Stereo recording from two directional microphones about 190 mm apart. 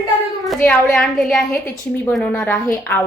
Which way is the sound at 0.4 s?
5° left (ahead or behind).